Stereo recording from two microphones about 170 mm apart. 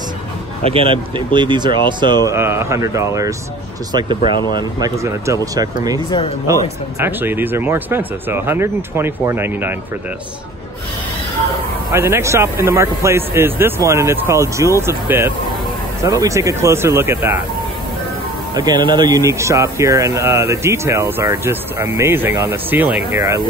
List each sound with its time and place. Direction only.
0.7 s speech: 30° right (ahead or behind)
2.2 s speech: 15° right (ahead or behind)
4.6 s speech: 20° right (ahead or behind)
6.0 s speech: 30° left (ahead or behind)
6.4 s speech: 15° right (ahead or behind)
11.9 s speech: 15° right (ahead or behind)
18.5 s speech: 25° right (ahead or behind)